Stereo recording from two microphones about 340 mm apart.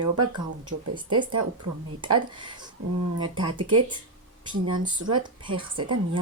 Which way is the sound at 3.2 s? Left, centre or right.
Centre.